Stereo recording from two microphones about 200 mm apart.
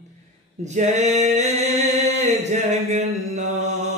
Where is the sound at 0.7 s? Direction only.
35° right (ahead or behind).